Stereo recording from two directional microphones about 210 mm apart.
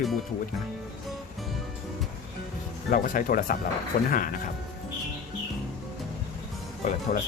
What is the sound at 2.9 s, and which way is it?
Speech, 40° left (ahead or behind).